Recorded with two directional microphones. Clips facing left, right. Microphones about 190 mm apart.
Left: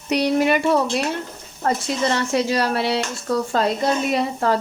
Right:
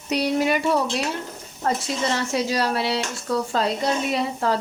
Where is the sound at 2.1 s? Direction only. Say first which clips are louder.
Left 3 dB; 60° left (ahead or behind).